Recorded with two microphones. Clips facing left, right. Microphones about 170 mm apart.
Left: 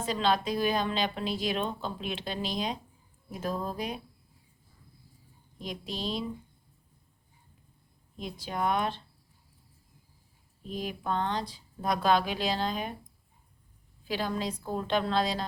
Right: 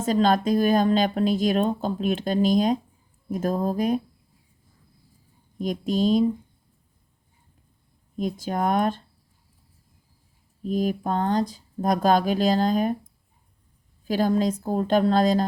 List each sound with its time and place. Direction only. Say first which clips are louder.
0.0 s speech: right 7 dB; 45° right (ahead or behind)
5.5 s speech: right 13 dB; 45° right (ahead or behind)
8.1 s speech: right 9 dB; 45° right (ahead or behind)
10.6 s speech: right 11 dB; 45° right (ahead or behind)
14.0 s speech: right 10 dB; 45° right (ahead or behind)